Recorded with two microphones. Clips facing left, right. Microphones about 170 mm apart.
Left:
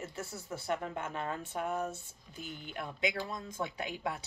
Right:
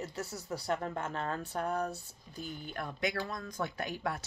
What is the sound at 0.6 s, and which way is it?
Speech, 40° right (ahead or behind).